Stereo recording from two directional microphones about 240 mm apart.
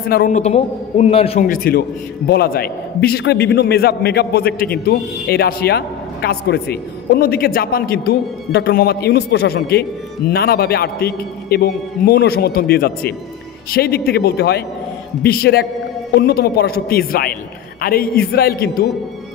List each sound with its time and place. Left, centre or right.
0.1 s a man's voice: left